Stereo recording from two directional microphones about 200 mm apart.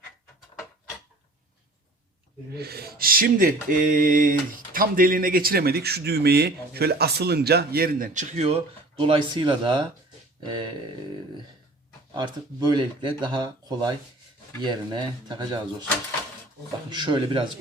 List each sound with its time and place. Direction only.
2.6 s a sound: 50° right (ahead or behind); by 9.8 s 25° right (ahead or behind)
10.4 s speech: 25° right (ahead or behind)
12.1 s speech: 20° right (ahead or behind)
16.9 s speech: 25° right (ahead or behind)